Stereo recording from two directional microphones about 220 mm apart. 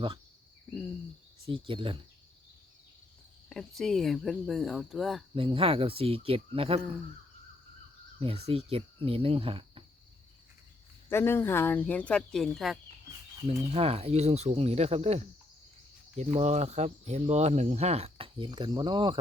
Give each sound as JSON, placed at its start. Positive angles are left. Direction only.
{"t": 1.5, "sound": "speech", "side_deg": -25}
{"t": 3.5, "sound": "speech", "side_deg": 0}
{"t": 5.3, "sound": "speech", "side_deg": -25}
{"t": 8.2, "sound": "speech", "side_deg": -25}
{"t": 11.1, "sound": "speech", "side_deg": 10}
{"t": 13.7, "sound": "speech", "side_deg": -25}